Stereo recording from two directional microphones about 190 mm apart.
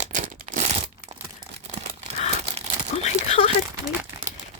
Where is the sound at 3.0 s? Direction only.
35° left (ahead or behind).